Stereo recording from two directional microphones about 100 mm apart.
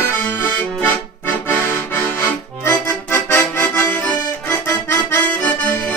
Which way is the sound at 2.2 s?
25° left (ahead or behind).